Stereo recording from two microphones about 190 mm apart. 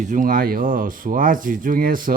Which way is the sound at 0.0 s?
45° right (ahead or behind).